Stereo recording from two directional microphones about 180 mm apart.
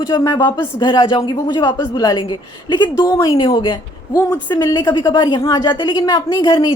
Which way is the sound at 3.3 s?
25° left (ahead or behind).